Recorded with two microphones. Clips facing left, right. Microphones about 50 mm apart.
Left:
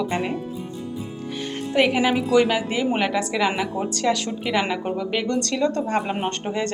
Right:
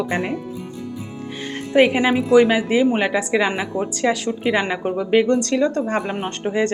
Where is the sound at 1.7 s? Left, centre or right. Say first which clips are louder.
Right 4 dB; right.